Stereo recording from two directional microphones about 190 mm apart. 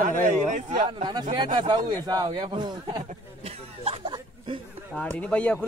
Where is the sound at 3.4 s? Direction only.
30° right (ahead or behind).